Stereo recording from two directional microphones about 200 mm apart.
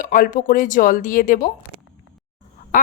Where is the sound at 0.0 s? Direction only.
40° left (ahead or behind).